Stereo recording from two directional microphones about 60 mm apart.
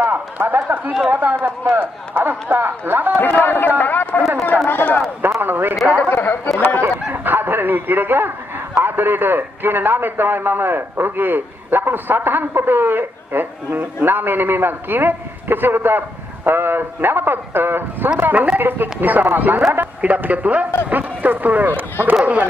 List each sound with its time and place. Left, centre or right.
0.0 s a man's voice: right
3.2 s a man's voice: left
5.4 s a man's voice: right
6.0 s a man's voice: left
6.8 s a man's voice: right
18.2 s a man's voice: right